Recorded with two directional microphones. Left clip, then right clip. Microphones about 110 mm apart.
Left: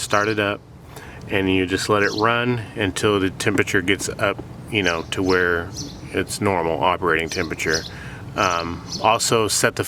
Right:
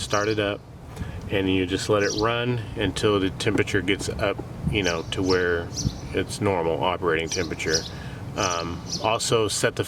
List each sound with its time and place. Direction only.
0.0 s a man's voice: 40° left (ahead or behind)